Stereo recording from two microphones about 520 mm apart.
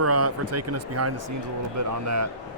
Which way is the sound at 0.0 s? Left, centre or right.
Right.